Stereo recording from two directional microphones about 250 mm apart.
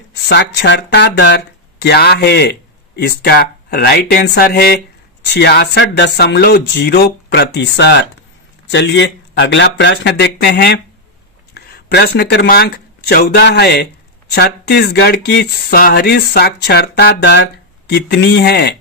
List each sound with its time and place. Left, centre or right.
0.3 s speech: left